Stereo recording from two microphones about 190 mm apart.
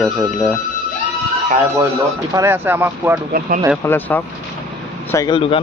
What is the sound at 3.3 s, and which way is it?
Speech, 50° right (ahead or behind).